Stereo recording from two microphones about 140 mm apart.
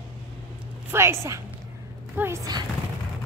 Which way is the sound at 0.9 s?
20° right (ahead or behind).